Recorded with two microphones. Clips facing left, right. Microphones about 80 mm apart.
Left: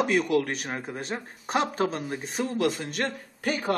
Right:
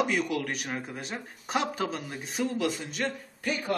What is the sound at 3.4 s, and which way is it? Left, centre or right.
Speech, left.